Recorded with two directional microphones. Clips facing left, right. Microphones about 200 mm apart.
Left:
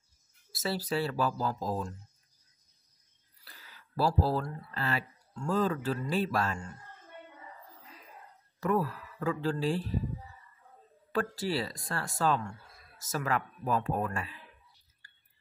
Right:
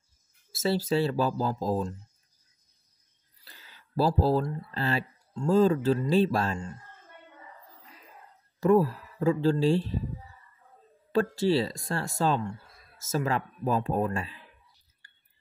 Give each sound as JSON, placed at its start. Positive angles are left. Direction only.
{"t": 0.5, "sound": "speech", "side_deg": -25}
{"t": 3.4, "sound": "speech", "side_deg": -25}
{"t": 8.5, "sound": "speech", "side_deg": -30}
{"t": 11.1, "sound": "speech", "side_deg": -25}